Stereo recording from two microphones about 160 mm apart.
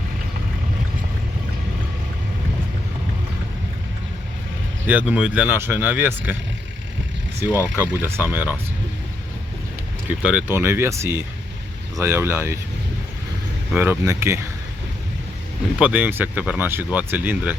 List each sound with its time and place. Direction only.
4.9 s speech: 10° right (ahead or behind)
7.4 s speech: 15° right (ahead or behind)
10.1 s speech: 10° right (ahead or behind)
13.7 s speech: 15° right (ahead or behind)
15.8 s speech: 10° right (ahead or behind)